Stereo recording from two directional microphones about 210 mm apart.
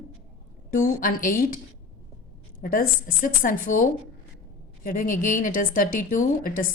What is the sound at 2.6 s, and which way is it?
A woman's voice, 40° left (ahead or behind).